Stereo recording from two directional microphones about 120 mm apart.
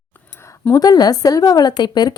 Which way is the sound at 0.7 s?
35° left (ahead or behind).